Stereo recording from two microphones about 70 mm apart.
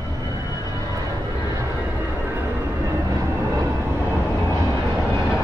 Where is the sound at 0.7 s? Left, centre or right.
Right.